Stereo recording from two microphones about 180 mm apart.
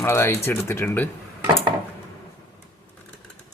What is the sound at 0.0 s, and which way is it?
Speech, 15° left (ahead or behind).